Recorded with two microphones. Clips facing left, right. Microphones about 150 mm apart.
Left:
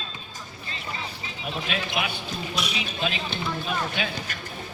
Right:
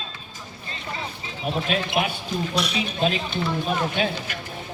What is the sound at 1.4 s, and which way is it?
A man's voice, 40° right (ahead or behind).